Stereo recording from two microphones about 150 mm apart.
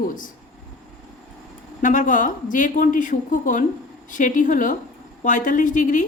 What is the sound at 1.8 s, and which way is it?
A woman's voice, 60° left (ahead or behind).